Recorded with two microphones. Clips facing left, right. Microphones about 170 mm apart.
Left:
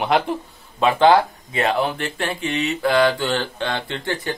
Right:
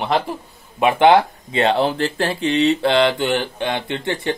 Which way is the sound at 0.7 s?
20° right (ahead or behind).